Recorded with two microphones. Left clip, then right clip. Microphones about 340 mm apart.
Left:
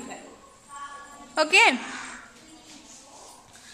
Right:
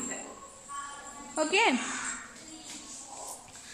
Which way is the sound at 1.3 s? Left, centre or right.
Left.